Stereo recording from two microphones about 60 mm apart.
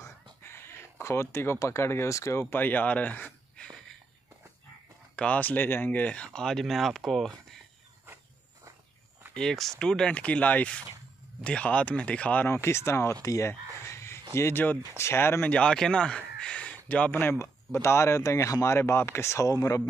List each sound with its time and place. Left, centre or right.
0.0 s a sound: left
1.6 s speech: left
2.5 s speech: left
5.1 s speech: left
6.4 s speech: centre
9.3 s speech: centre
12.4 s speech: left
13.2 s speech: left
13.5 s a sound: left
15.0 s speech: left
15.4 s speech: centre; by 17.4 s left
17.8 s speech: left